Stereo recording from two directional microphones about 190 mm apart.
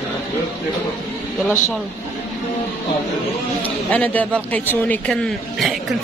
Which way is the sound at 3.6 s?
10° left (ahead or behind).